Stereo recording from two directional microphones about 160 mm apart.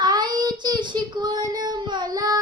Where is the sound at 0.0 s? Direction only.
25° right (ahead or behind).